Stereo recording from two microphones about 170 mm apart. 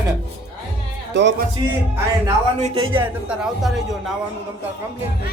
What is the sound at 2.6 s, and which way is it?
Speech, 30° right (ahead or behind).